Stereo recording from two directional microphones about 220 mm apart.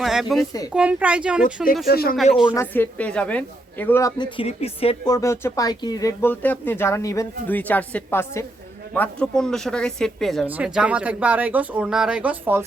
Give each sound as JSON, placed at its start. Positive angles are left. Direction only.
{"t": 0.0, "sound": "a sound", "side_deg": 0}
{"t": 0.7, "sound": "speech", "side_deg": -5}
{"t": 1.9, "sound": "speech", "side_deg": 45}
{"t": 2.6, "sound": "a woman's voice", "side_deg": 10}